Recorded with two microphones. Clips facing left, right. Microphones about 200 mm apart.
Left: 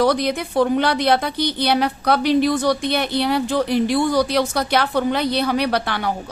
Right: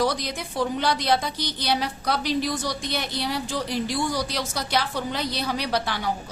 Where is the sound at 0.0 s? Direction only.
60° left (ahead or behind).